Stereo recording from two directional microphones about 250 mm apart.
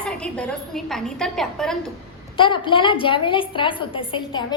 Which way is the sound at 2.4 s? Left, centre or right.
Centre.